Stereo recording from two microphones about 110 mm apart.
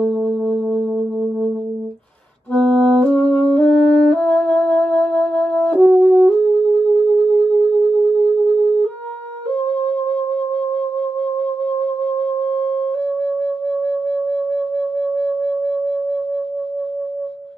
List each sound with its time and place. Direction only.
0.0 s music: 10° left (ahead or behind)
2.5 s music: 5° left (ahead or behind)
9.6 s music: 80° left
10.5 s music: 25° left (ahead or behind)
12.4 s wind instrument: 30° left (ahead or behind)
13.0 s music: 10° left (ahead or behind)